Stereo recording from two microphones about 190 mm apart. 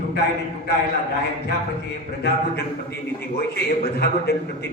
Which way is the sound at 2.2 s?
60° left (ahead or behind).